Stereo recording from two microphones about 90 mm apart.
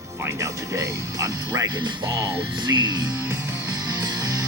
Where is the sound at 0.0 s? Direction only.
30° right (ahead or behind); by 2.0 s 50° right (ahead or behind).